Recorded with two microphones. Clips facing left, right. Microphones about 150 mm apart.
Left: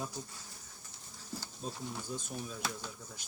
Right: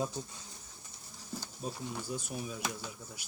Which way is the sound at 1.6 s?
10° right (ahead or behind).